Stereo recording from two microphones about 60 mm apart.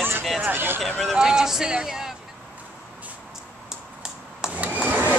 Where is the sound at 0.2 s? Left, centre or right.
Centre.